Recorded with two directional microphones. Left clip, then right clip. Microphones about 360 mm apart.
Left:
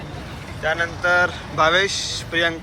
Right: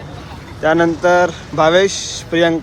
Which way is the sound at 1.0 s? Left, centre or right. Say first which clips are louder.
Right 5 dB; centre.